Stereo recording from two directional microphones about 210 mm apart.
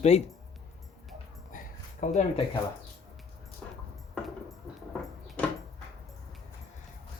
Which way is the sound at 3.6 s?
5° left (ahead or behind).